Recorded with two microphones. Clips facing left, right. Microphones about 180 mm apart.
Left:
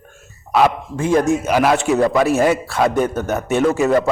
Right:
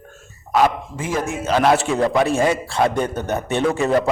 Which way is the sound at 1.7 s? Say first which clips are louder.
Left 2 dB; 5° right (ahead or behind).